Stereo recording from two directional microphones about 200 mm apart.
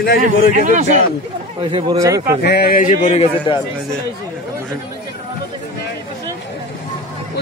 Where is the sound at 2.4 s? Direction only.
55° left (ahead or behind); by 3.5 s 30° left (ahead or behind).